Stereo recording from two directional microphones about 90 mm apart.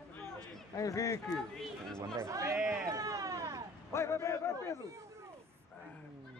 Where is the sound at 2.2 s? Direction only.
35° right (ahead or behind).